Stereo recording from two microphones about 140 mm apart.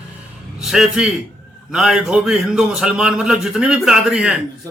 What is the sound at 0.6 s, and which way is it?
A man's voice, 5° right (ahead or behind).